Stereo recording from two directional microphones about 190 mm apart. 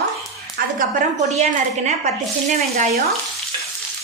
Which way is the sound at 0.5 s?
40° right (ahead or behind).